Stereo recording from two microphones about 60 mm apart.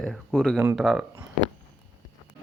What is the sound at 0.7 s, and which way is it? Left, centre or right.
Speech, centre.